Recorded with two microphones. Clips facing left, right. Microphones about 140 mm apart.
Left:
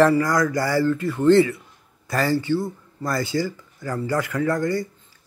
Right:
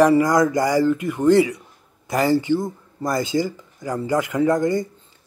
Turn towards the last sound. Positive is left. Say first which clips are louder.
# right 4 dB
turn(degrees=-20)  # may be behind; listen again after turning